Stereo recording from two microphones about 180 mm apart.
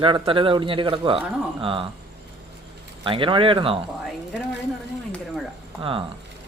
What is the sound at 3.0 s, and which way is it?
Speech, 30° right (ahead or behind).